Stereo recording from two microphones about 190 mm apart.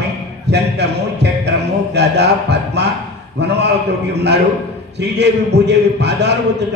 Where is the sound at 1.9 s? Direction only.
60° right (ahead or behind).